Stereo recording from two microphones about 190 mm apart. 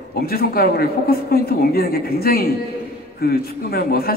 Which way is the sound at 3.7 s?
55° left (ahead or behind).